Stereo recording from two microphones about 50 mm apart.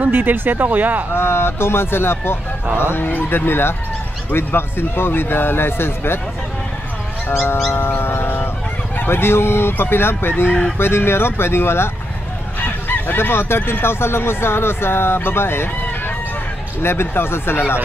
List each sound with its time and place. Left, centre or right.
0.0 s speech: right
1.1 s speech: left
7.6 s a sound: left
8.9 s speech: left
12.5 s speech: left
16.8 s speech: left